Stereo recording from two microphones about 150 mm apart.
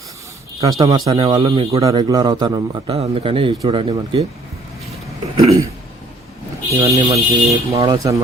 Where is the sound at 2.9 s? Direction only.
40° right (ahead or behind).